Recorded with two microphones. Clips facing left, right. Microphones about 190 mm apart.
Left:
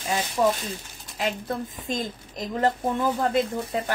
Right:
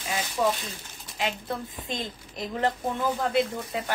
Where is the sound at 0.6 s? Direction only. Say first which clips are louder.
Left 5 dB; 40° left (ahead or behind).